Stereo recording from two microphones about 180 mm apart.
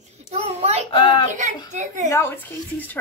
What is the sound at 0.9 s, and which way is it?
Speech, 25° left (ahead or behind).